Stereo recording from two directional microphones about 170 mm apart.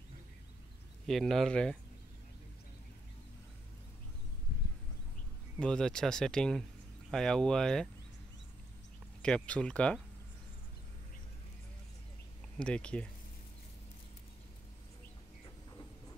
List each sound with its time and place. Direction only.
1.0 s speech: centre (ahead or behind)
5.6 s speech: 5° left (ahead or behind)
9.2 s speech: 5° left (ahead or behind)
12.5 s speech: 5° left (ahead or behind)
15.4 s a sound: 20° left (ahead or behind)